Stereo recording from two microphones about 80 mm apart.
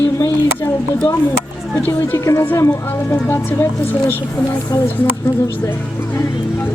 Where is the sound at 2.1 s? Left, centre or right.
Left.